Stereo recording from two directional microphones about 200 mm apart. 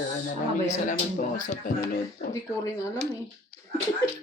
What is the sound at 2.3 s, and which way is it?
Speech, 15° left (ahead or behind).